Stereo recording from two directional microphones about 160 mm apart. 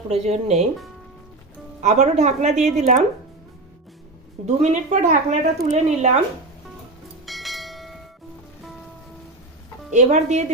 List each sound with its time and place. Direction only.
0.1 s speech: 45° right (ahead or behind)
1.8 s speech: 45° right (ahead or behind)
4.4 s speech: 45° right (ahead or behind)
7.3 s bell: centre (ahead or behind)
9.9 s speech: 45° right (ahead or behind)